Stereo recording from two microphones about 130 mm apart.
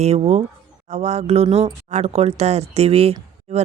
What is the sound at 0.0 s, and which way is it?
Speech, 55° right (ahead or behind).